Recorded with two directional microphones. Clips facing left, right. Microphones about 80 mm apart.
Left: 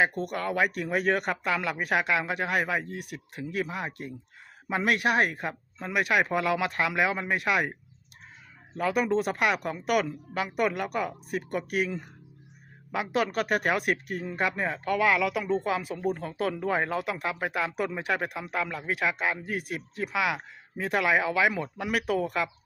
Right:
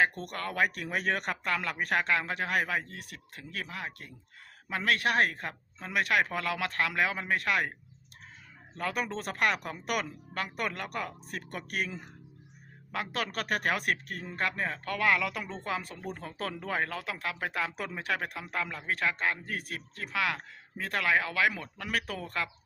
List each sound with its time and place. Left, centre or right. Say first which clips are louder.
0.0 s a man's voice: left 3 dB; centre